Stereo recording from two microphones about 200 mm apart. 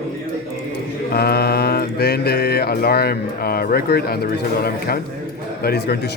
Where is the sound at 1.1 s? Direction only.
50° left (ahead or behind).